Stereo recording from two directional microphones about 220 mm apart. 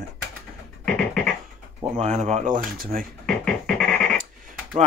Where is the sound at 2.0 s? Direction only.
30° right (ahead or behind).